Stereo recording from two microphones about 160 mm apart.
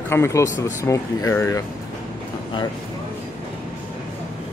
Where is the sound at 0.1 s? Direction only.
20° left (ahead or behind).